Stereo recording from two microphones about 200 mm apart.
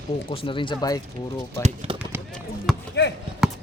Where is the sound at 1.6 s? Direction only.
30° right (ahead or behind).